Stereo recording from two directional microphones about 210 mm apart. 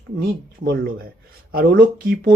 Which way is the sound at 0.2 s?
45° right (ahead or behind).